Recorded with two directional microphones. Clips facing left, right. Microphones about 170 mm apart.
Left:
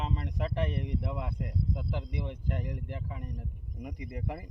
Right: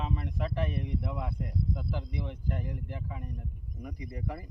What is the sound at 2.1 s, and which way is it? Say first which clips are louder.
Speech: even; 20° left (ahead or behind).